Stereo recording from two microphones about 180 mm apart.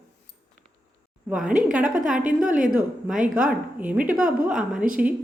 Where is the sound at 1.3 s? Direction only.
5° right (ahead or behind).